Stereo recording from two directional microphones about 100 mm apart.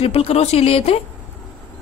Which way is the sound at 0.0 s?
80° left.